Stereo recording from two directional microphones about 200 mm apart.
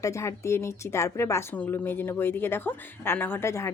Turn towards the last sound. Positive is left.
turn(degrees=15)  # may be behind; listen again after turning